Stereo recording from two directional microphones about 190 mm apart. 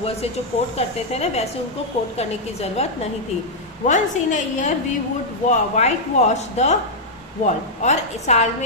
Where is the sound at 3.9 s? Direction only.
40° left (ahead or behind).